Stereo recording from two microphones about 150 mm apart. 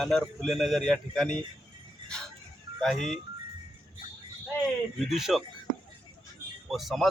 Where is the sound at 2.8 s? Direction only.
Centre (ahead or behind).